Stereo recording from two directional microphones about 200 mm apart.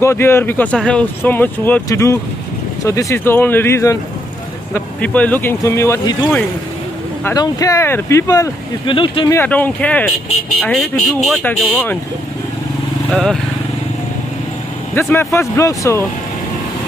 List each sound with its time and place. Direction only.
0.0 s speech: 10° left (ahead or behind)
7.2 s speech: 15° left (ahead or behind)
9.3 s speech: 10° left (ahead or behind)
13.1 s speech: centre (ahead or behind)
15.0 s speech: 15° left (ahead or behind)